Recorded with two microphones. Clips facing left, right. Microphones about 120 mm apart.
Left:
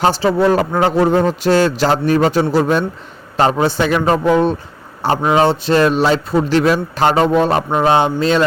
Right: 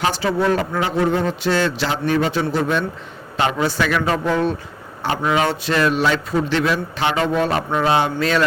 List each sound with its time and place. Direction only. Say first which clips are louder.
0.0 s a man's voice: left 6 dB; 30° left (ahead or behind)
5.0 s a man's voice: left 6 dB; 35° left (ahead or behind)